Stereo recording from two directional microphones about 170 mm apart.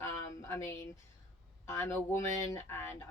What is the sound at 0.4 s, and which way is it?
Speech, 15° left (ahead or behind).